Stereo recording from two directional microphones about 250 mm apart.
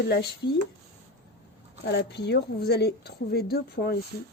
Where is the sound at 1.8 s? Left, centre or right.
Left.